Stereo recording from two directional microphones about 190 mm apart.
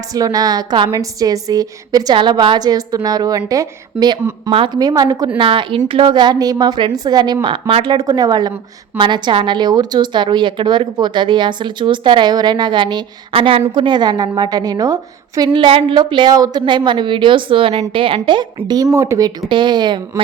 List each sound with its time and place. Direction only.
0.1 s a woman's voice: 20° right (ahead or behind)